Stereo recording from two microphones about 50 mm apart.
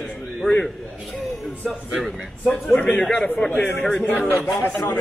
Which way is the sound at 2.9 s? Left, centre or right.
Centre.